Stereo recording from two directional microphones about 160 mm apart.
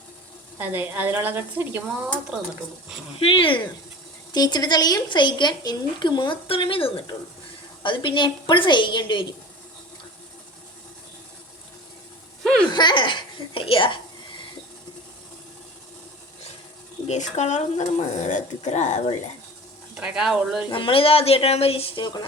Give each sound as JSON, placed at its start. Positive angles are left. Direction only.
{"t": 0.6, "sound": "a woman's voice", "side_deg": -10}
{"t": 3.2, "sound": "a woman's voice", "side_deg": 35}
{"t": 12.4, "sound": "a sound", "side_deg": 5}
{"t": 12.7, "sound": "a sound", "side_deg": 30}
{"t": 17.1, "sound": "speech", "side_deg": 45}
{"t": 20.0, "sound": "speech", "side_deg": -5}
{"t": 20.7, "sound": "speech", "side_deg": 30}